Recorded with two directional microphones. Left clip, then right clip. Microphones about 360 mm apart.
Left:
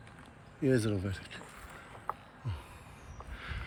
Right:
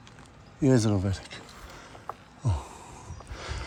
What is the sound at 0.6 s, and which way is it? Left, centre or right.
Speech, right.